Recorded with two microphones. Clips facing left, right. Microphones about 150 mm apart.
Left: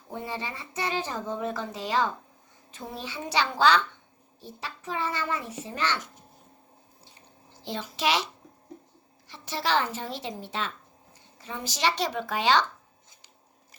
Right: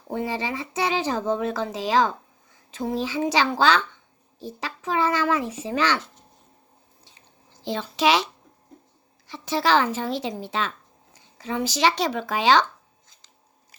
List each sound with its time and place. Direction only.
0.1 s speech: 90° right
7.6 s speech: 90° right
9.2 s speech: 90° right